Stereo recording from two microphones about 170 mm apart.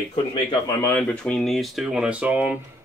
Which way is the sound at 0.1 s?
30° left (ahead or behind).